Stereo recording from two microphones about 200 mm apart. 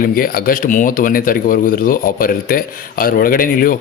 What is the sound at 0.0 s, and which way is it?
Speech, 45° left (ahead or behind).